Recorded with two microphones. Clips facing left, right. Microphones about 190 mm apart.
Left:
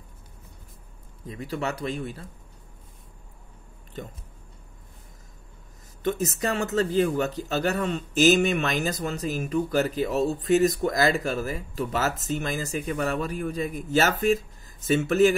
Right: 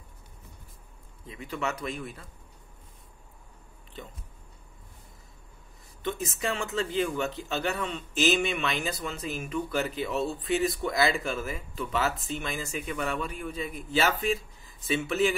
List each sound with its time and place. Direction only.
1.2 s speech: 40° left (ahead or behind)
4.0 s speech: 45° left (ahead or behind)
6.0 s speech: 40° left (ahead or behind)